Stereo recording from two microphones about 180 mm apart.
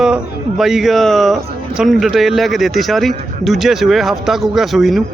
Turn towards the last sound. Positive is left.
turn(degrees=0)  # may be behind; listen again after turning